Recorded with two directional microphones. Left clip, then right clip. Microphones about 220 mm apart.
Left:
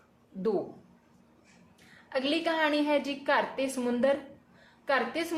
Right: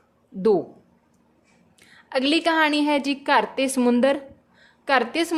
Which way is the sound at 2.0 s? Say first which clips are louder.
Right 8 dB; 55° right (ahead or behind).